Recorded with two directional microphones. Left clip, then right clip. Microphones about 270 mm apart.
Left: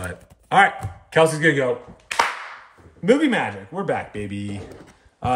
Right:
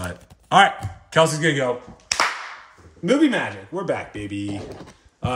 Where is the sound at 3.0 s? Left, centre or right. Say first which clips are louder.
Left 1 dB; left.